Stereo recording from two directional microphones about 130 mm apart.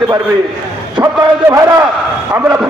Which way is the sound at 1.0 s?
10° right (ahead or behind).